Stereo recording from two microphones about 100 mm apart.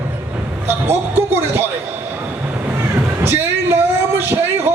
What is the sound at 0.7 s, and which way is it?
Speech, 25° right (ahead or behind).